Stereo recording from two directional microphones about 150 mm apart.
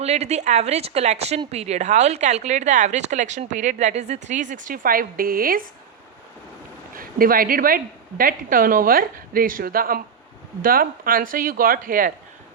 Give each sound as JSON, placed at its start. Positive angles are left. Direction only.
{"t": 0.0, "sound": "a woman's voice", "side_deg": -45}
{"t": 6.9, "sound": "a woman's voice", "side_deg": -70}